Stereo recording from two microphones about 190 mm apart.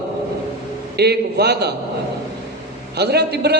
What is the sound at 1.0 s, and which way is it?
Speech, 60° right (ahead or behind).